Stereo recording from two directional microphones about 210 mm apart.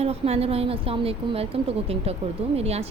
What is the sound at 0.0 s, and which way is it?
Speech, 30° right (ahead or behind).